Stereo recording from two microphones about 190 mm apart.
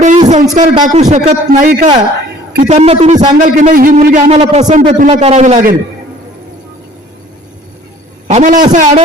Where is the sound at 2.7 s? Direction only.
35° right (ahead or behind).